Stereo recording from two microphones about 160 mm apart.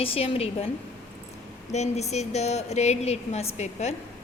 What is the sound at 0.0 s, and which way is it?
Speech, 35° left (ahead or behind).